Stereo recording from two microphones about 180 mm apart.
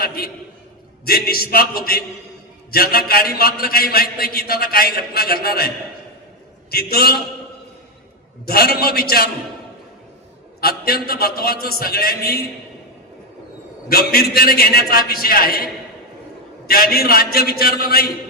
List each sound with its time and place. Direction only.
1.0 s a man's voice: 55° left (ahead or behind)
8.4 s a man's voice: 60° left (ahead or behind)
10.6 s a man's voice: 55° left (ahead or behind)
13.8 s a man's voice: 60° left (ahead or behind)